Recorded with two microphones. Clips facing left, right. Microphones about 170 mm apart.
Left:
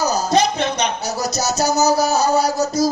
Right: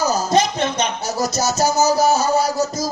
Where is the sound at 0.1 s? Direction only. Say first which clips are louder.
Even; 50° right (ahead or behind).